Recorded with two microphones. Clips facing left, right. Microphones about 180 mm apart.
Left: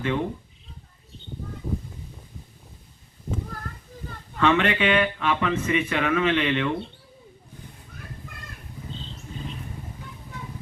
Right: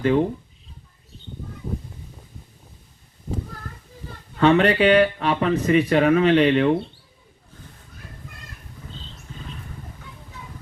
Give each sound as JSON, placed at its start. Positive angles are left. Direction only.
{"t": 0.0, "sound": "speech", "side_deg": -35}
{"t": 4.4, "sound": "speech", "side_deg": -35}